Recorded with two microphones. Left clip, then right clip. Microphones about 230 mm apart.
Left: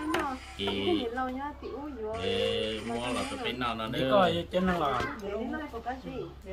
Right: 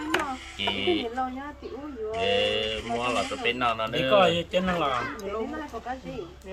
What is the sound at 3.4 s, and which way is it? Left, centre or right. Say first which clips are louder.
Speech: right 7 dB; centre.